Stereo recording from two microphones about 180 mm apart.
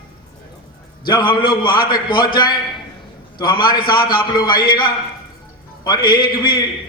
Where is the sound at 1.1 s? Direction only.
25° left (ahead or behind).